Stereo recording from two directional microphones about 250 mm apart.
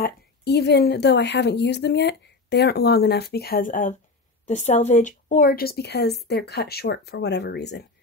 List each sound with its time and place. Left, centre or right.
0.0 s a woman's voice: left